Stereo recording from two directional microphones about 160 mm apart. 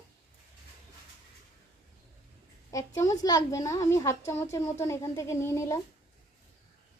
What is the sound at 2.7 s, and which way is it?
A woman's voice, 20° left (ahead or behind).